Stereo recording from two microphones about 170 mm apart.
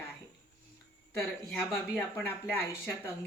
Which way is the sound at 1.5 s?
Centre (ahead or behind).